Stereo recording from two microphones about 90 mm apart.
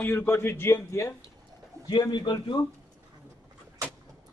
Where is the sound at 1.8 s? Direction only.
55° left (ahead or behind).